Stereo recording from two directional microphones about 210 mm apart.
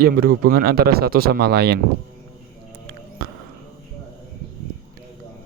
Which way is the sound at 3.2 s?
50° right (ahead or behind).